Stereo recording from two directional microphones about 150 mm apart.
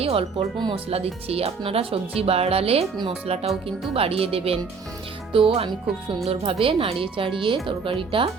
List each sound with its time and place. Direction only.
0.0 s speech: 40° right (ahead or behind)